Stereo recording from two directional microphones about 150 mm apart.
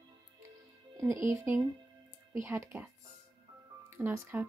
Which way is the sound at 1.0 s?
20° right (ahead or behind).